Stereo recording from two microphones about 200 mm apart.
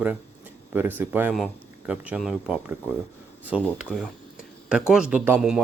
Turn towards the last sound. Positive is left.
turn(degrees=-5)  # may be behind; listen again after turning